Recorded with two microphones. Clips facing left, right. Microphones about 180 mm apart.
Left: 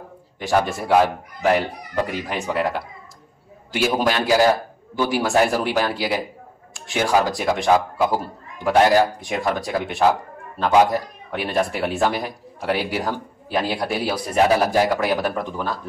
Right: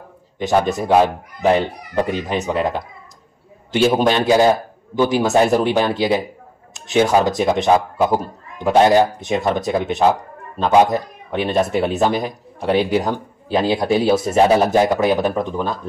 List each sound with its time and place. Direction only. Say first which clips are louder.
0.4 s speech: right 3 dB; 20° right (ahead or behind)